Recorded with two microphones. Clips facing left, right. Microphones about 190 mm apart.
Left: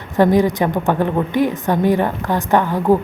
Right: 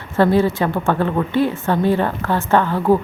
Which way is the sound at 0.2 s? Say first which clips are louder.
Left 1 dB; 15° left (ahead or behind).